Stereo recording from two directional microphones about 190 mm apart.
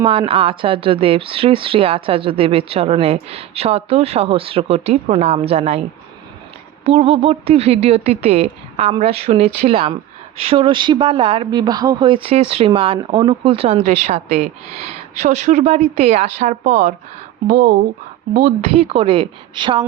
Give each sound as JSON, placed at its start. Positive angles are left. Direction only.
{"t": 0.0, "sound": "speech", "side_deg": -30}
{"t": 6.8, "sound": "speech", "side_deg": -30}
{"t": 18.9, "sound": "a woman's voice", "side_deg": -25}